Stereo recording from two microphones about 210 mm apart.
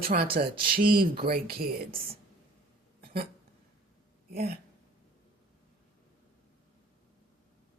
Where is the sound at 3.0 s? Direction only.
45° right (ahead or behind).